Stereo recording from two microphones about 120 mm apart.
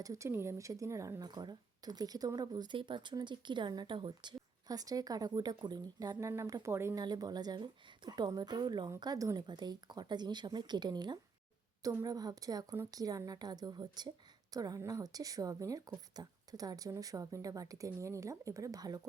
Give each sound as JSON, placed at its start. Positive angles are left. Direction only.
{"t": 0.0, "sound": "speech", "side_deg": -25}
{"t": 7.0, "sound": "a woman's voice", "side_deg": -35}